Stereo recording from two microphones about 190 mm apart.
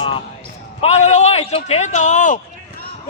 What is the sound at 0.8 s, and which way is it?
A man's voice, 35° left (ahead or behind).